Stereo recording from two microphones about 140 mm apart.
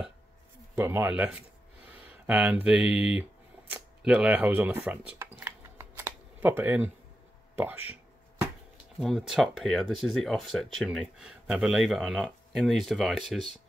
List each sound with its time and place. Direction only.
0.7 s speech: 20° right (ahead or behind)
5.4 s camera: 15° right (ahead or behind)
7.5 s a sound: 15° right (ahead or behind)
9.0 s speech: centre (ahead or behind)